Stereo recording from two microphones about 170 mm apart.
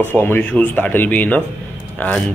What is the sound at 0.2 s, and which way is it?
Speech, 10° left (ahead or behind).